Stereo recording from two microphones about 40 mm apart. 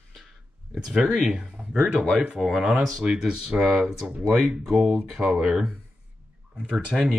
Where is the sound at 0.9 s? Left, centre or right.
Centre.